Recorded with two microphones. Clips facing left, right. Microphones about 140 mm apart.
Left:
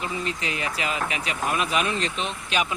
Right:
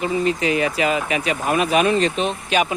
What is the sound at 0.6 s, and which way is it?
Speech, 60° right (ahead or behind).